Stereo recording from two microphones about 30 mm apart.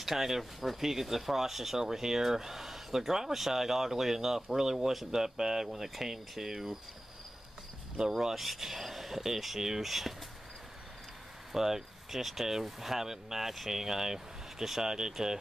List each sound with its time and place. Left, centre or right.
0.0 s speech: centre
8.4 s speech: centre
11.5 s speech: centre